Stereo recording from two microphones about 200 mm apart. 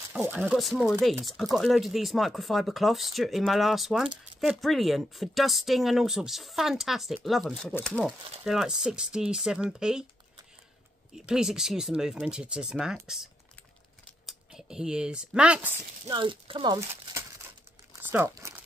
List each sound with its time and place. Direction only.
0.1 s speech: 5° right (ahead or behind)
11.1 s speech: 5° right (ahead or behind)
16.1 s speech: 25° right (ahead or behind)